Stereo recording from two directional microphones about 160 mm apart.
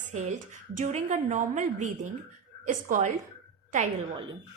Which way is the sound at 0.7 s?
50° right (ahead or behind).